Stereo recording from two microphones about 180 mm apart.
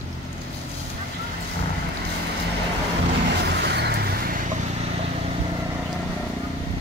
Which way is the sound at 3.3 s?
70° right (ahead or behind).